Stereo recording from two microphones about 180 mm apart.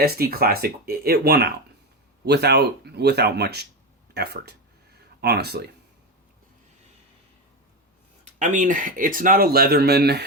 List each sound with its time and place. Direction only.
0.0 s speech: 60° right (ahead or behind)
8.4 s speech: 45° right (ahead or behind); by 10.2 s 65° right (ahead or behind)